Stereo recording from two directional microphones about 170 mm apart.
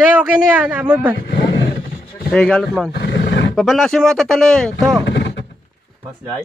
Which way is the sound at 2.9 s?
75° left (ahead or behind).